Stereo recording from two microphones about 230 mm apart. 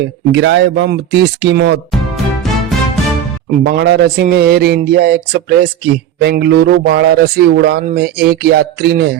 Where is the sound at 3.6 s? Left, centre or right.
Right.